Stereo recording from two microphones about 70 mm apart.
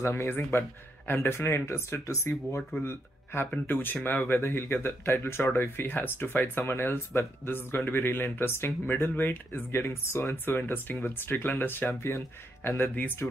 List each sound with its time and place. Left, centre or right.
0.0 s speech: left
0.3 s speech: left
4.2 s speech: left